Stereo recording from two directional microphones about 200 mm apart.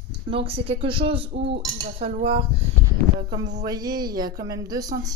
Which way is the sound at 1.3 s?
60° right (ahead or behind).